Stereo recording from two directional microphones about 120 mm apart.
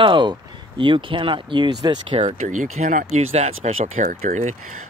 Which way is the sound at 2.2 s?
90° right.